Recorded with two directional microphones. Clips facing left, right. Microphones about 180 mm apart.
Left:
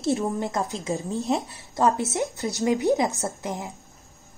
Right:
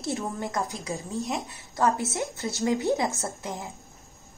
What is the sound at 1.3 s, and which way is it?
Speech, 35° left (ahead or behind).